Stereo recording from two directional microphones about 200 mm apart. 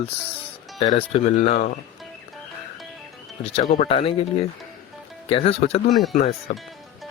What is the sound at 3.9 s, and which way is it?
Speech, 30° left (ahead or behind).